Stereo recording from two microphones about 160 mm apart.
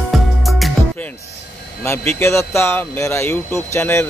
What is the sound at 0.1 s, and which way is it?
Music, centre (ahead or behind).